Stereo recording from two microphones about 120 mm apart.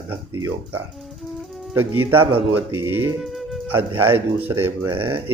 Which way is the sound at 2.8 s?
20° right (ahead or behind).